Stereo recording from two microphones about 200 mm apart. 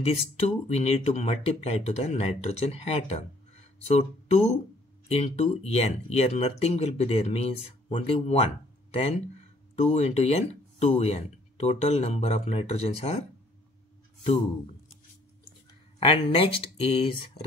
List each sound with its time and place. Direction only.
0.0 s speech: 30° left (ahead or behind)
9.8 s speech: 35° left (ahead or behind)
16.0 s speech: 25° left (ahead or behind)